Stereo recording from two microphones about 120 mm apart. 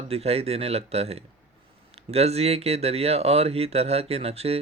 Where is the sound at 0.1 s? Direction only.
60° right (ahead or behind).